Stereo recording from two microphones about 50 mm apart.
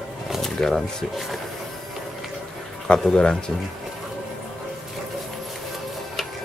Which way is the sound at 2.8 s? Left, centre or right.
Centre.